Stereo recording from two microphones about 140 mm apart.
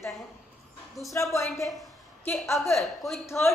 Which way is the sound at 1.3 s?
20° left (ahead or behind).